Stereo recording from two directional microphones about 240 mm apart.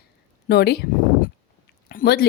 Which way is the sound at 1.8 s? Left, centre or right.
Left.